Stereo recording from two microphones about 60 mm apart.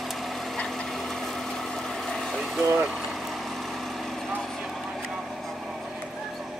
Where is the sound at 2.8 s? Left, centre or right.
Centre.